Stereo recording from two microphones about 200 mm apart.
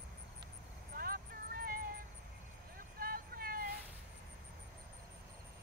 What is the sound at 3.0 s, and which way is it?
Vehicle, 45° right (ahead or behind).